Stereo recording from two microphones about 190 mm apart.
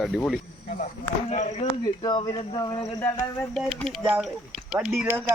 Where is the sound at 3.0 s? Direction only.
10° left (ahead or behind).